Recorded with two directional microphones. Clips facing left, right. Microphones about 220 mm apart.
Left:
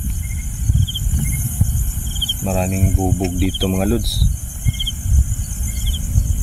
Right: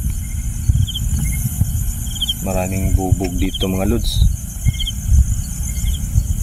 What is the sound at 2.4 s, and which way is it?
Speech, centre (ahead or behind).